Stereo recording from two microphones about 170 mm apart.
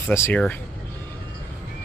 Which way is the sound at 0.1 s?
15° left (ahead or behind).